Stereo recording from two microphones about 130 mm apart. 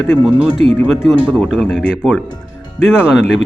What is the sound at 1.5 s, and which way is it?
Speech, centre (ahead or behind).